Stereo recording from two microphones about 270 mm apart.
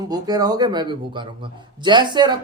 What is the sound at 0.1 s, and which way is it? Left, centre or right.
Speech, centre.